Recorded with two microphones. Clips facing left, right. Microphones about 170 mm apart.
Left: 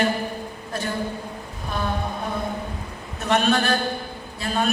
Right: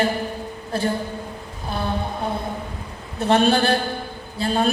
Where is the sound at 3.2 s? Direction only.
30° right (ahead or behind).